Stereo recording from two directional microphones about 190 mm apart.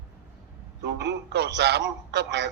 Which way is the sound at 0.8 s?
65° right (ahead or behind).